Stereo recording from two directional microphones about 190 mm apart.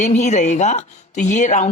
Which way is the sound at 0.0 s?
40° left (ahead or behind).